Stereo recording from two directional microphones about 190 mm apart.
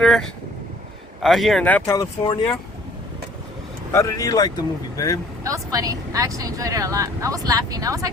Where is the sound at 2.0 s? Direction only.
25° left (ahead or behind).